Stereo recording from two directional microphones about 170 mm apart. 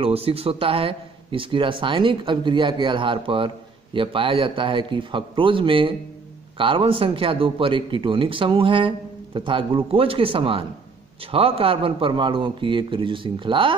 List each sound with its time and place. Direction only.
0.0 s a man's voice: 35° right (ahead or behind)